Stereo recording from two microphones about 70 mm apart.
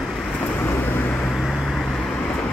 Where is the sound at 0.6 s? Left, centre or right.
Left.